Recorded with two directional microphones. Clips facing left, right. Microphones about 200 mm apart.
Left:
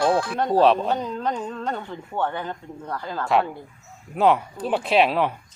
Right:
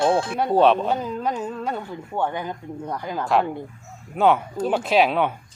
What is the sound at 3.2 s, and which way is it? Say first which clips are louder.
Speech: even; centre (ahead or behind).